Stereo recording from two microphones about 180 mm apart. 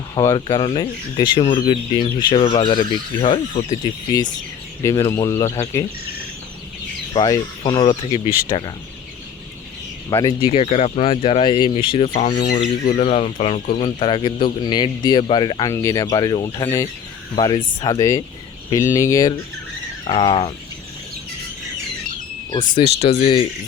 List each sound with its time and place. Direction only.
0.1 s speech: 20° left (ahead or behind)
4.8 s speech: 15° left (ahead or behind)
7.3 s speech: 20° left (ahead or behind)
10.1 s speech: 20° left (ahead or behind)
12.0 s speech: 45° left (ahead or behind)
12.5 s speech: 35° left (ahead or behind); by 19.3 s 15° left (ahead or behind)
20.1 s speech: 30° left (ahead or behind)
22.7 s speech: 35° left (ahead or behind)